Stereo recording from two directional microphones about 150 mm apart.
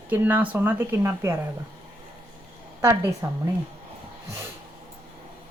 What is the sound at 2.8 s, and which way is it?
Speech, 15° right (ahead or behind).